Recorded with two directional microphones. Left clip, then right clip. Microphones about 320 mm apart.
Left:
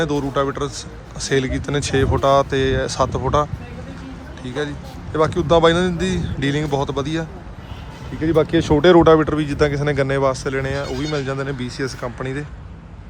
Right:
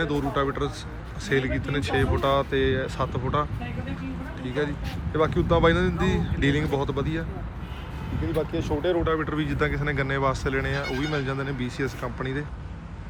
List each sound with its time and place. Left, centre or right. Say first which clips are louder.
0.0 s speech: left 6 dB; centre
8.4 s speech: left 11 dB; left
9.0 s speech: left 12 dB; centre